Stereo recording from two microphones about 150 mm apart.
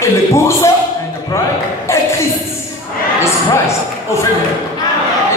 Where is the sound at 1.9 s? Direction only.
20° left (ahead or behind).